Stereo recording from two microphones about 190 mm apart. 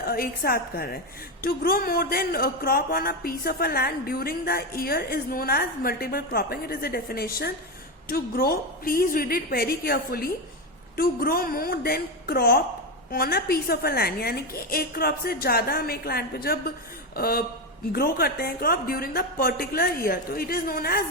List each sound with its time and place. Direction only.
0.1 s speech: 50° left (ahead or behind)